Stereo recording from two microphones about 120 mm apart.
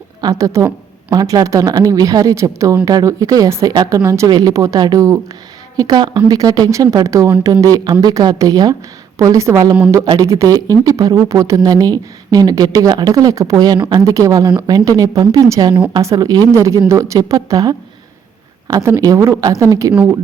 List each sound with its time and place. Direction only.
0.2 s speech: 30° right (ahead or behind)
19.9 s speech: 10° right (ahead or behind)